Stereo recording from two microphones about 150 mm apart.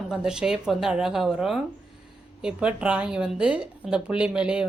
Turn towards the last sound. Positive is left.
turn(degrees=-5)  # may be behind; listen again after turning